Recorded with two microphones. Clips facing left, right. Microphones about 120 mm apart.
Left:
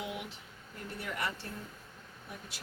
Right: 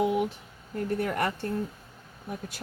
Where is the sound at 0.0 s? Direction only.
45° right (ahead or behind).